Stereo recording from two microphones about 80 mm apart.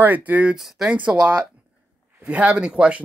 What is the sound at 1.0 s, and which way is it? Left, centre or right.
Speech, centre.